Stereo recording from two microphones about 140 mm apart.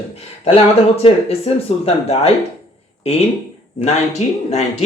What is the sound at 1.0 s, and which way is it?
Speech, 45° left (ahead or behind).